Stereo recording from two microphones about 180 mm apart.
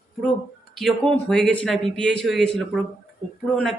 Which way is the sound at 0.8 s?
Centre (ahead or behind).